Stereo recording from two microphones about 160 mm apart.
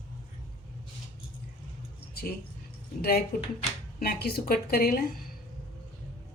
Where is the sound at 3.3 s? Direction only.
70° left (ahead or behind).